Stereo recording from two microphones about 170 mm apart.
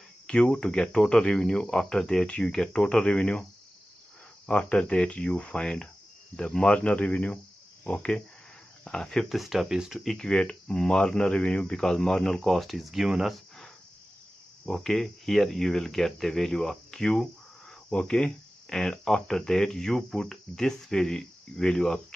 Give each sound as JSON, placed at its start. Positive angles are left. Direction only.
{"t": 0.3, "sound": "speech", "side_deg": 5}
{"t": 4.5, "sound": "speech", "side_deg": 5}
{"t": 7.8, "sound": "cricket", "side_deg": 10}
{"t": 8.8, "sound": "speech", "side_deg": 5}
{"t": 14.7, "sound": "speech", "side_deg": 5}